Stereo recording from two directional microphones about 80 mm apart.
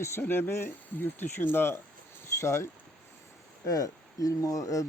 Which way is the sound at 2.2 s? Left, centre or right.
Left.